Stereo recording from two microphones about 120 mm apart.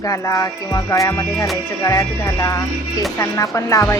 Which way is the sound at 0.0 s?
30° left (ahead or behind).